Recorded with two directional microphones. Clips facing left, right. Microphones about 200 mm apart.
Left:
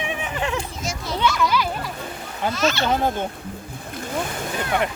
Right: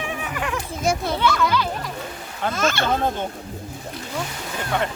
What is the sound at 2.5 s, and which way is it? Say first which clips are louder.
Speech: even; 50° right (ahead or behind).